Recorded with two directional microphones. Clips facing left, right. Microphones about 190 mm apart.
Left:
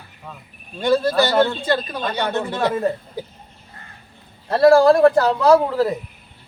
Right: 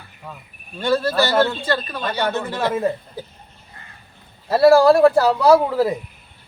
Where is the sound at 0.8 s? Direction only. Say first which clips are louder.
Left 2 dB; 15° left (ahead or behind).